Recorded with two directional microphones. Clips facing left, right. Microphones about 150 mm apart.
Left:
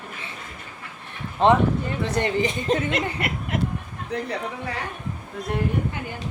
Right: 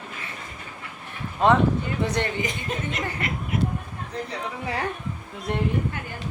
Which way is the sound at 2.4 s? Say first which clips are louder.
Left 6 dB; 25° left (ahead or behind).